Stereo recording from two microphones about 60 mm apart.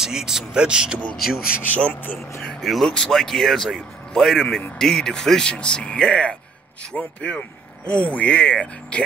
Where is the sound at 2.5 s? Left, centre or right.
Centre.